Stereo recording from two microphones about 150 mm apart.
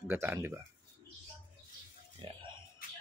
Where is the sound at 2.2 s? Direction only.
35° right (ahead or behind).